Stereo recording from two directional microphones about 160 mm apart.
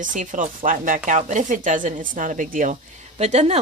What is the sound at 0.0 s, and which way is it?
Speech, 55° right (ahead or behind).